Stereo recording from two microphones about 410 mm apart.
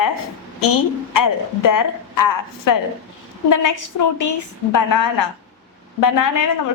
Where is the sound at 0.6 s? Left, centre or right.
Left.